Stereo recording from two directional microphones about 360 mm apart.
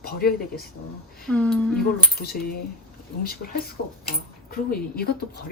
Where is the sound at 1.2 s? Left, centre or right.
Centre.